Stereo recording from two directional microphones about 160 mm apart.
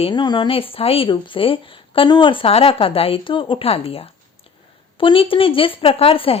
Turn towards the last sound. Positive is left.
turn(degrees=35)  # may be behind; listen again after turning